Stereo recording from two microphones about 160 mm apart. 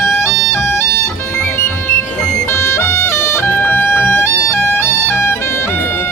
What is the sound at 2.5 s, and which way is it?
Music, 15° left (ahead or behind).